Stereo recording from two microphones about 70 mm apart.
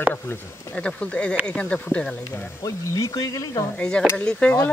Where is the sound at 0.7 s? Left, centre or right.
Centre.